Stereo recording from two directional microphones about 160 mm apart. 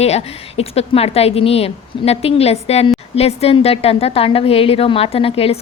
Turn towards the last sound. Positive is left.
turn(degrees=35)  # may be behind; listen again after turning